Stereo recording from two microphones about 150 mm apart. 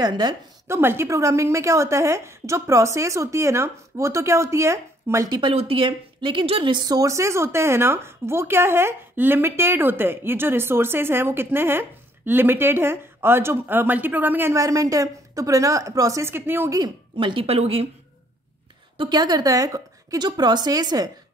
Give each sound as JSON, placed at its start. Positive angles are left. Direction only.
{"t": 0.0, "sound": "a woman's voice", "side_deg": -30}
{"t": 0.7, "sound": "a woman's voice", "side_deg": -15}
{"t": 5.3, "sound": "a woman's voice", "side_deg": -35}
{"t": 18.9, "sound": "a woman's voice", "side_deg": -30}